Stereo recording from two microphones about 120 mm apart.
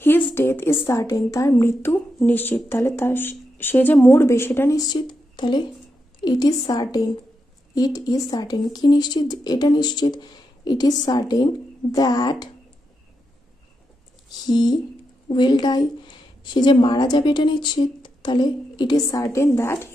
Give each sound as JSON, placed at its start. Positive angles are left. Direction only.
{"t": 0.3, "sound": "a woman's voice", "side_deg": 20}
{"t": 4.7, "sound": "speech", "side_deg": 35}
{"t": 14.5, "sound": "speech", "side_deg": 35}